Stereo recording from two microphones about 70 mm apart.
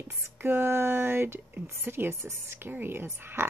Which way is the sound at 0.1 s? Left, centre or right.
Right.